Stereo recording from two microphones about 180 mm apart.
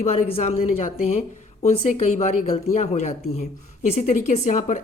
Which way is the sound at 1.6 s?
35° left (ahead or behind).